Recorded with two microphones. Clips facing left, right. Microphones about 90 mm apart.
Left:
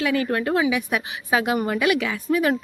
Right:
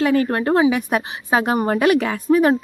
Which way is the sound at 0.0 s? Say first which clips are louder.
Right 5 dB; 40° right (ahead or behind).